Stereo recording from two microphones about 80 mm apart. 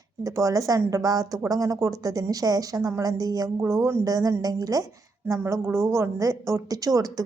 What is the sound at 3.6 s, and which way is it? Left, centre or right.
Speech, right.